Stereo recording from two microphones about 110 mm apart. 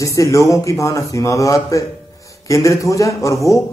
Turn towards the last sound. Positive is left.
turn(degrees=30)  # may be behind; listen again after turning